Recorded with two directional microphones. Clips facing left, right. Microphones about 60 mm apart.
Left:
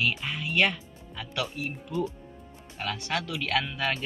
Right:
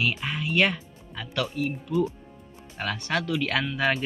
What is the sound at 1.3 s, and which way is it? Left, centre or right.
Speech, centre.